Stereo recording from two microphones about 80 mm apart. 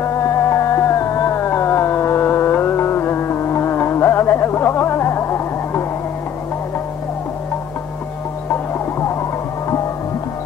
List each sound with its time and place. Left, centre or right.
0.0 s music: left